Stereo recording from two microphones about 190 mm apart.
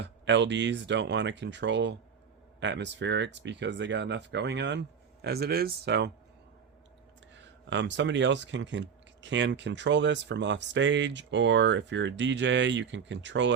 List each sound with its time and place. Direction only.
0.0 s speech: 70° right (ahead or behind)
7.3 s speech: 70° right (ahead or behind)